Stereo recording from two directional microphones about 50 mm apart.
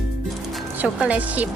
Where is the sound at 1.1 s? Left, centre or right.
Right.